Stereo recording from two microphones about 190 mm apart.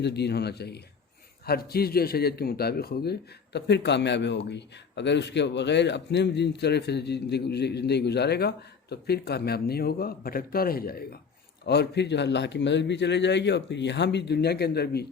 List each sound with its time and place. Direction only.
0.0 s a man's voice: 60° left (ahead or behind)